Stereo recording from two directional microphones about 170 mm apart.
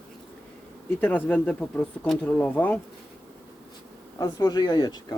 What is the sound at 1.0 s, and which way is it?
Speech, 10° left (ahead or behind).